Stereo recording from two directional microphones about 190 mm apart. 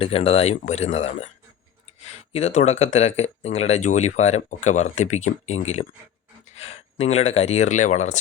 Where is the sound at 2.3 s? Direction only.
35° left (ahead or behind).